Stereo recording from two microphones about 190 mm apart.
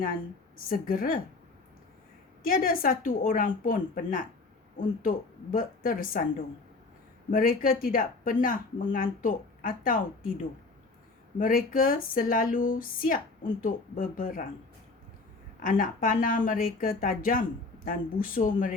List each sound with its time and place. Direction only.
0.6 s speech: 50° left (ahead or behind)
2.5 s speech: 50° left (ahead or behind)
7.3 s speech: 50° left (ahead or behind)
11.3 s speech: 45° left (ahead or behind)
15.6 s speech: 45° left (ahead or behind)